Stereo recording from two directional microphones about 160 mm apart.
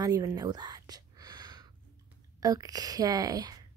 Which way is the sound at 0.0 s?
20° right (ahead or behind).